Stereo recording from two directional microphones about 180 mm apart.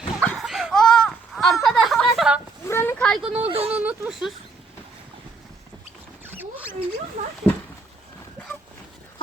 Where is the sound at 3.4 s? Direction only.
30° right (ahead or behind).